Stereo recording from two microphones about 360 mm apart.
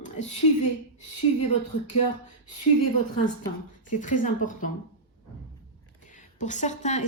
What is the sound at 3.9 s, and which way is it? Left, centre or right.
Speech, left.